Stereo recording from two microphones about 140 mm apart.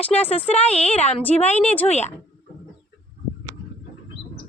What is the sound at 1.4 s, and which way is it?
Speech, 55° left (ahead or behind).